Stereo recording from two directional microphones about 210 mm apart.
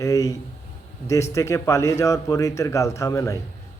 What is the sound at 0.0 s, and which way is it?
A man's voice, 15° left (ahead or behind).